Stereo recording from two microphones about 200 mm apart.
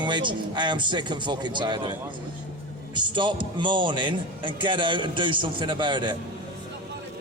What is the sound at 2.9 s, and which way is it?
A man's voice, 25° right (ahead or behind).